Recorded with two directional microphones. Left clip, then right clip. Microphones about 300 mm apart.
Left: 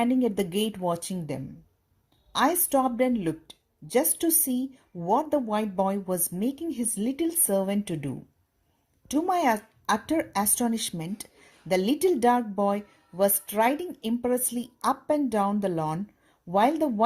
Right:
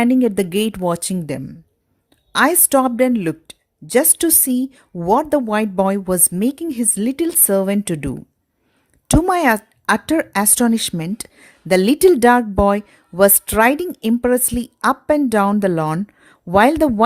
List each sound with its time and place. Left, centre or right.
0.0 s speech: right